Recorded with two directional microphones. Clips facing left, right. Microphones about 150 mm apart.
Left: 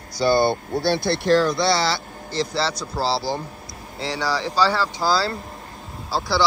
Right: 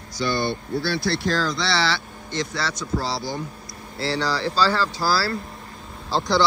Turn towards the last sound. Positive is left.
turn(degrees=5)  # may be behind; listen again after turning